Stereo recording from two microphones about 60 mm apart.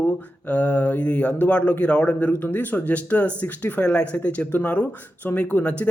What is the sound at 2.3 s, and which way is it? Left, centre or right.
Speech, left.